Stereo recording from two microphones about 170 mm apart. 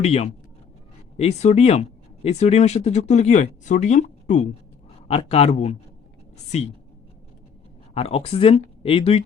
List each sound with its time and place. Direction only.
0.0 s speech: 35° left (ahead or behind)
7.9 s speech: 35° left (ahead or behind)